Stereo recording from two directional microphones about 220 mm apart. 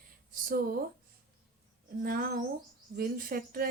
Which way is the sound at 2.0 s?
45° right (ahead or behind).